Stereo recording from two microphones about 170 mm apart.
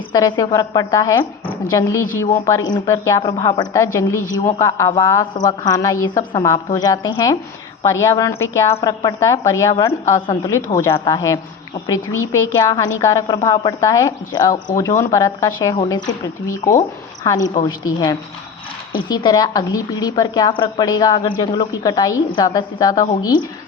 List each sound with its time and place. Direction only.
0.1 s a woman's voice: 25° left (ahead or behind)